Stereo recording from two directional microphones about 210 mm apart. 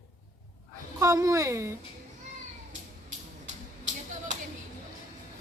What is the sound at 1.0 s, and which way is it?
Speech, 15° right (ahead or behind).